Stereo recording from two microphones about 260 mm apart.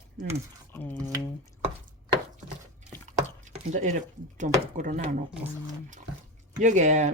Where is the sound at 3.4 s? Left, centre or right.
Right.